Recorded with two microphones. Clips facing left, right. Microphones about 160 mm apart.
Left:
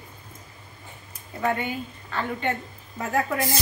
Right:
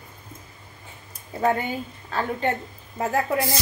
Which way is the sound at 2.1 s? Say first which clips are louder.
Right 3 dB; 35° right (ahead or behind).